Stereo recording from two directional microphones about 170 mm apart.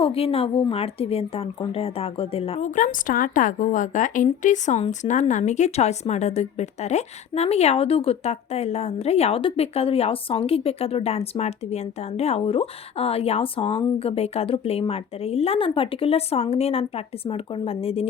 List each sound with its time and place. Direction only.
0.0 s speech: 35° left (ahead or behind)